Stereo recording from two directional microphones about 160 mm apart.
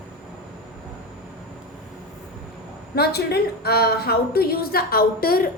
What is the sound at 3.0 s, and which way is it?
A woman's voice, 80° left.